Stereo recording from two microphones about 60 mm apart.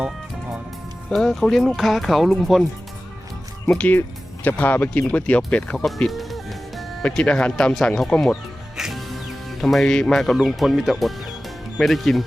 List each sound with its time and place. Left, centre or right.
1.1 s speech: centre
3.7 s speech: left
6.1 s music: centre
7.0 s speech: centre
8.8 s music: centre
10.3 s speech: centre